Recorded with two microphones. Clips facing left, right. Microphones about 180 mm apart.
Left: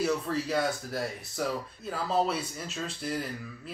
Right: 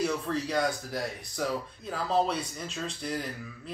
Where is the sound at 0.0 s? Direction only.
5° left (ahead or behind).